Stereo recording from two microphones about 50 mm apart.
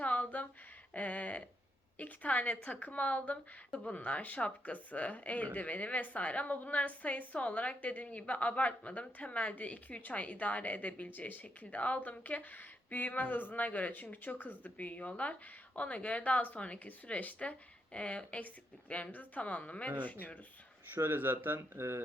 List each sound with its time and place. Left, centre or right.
0.0 s a sound: left
2.0 s speech: left
20.9 s speech: right